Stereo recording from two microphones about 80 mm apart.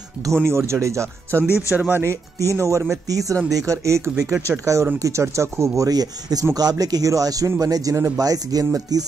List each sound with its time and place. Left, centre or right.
0.2 s speech: right
1.5 s speech: left
2.0 s speech: right